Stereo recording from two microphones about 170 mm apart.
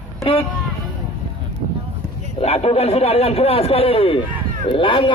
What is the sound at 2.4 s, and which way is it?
A man's voice, 35° left (ahead or behind).